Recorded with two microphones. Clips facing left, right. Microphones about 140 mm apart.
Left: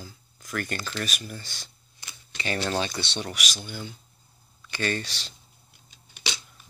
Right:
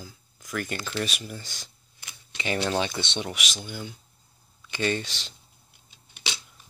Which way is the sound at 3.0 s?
20° right (ahead or behind).